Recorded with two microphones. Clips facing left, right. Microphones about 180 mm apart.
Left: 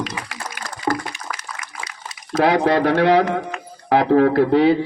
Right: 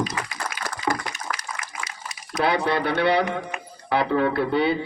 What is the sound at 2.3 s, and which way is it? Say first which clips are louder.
Speech: left 6 dB; 90° left.